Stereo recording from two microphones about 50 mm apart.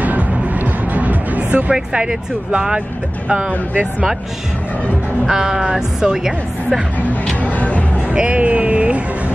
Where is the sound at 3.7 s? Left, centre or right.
Right.